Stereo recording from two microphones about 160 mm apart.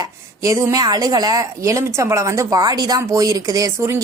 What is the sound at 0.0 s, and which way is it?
Speech, 20° right (ahead or behind).